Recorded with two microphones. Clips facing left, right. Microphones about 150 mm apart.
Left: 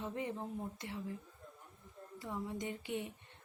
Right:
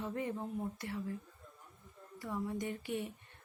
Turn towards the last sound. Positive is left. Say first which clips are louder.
# right 2 dB
turn(degrees=20)  # may be behind; listen again after turning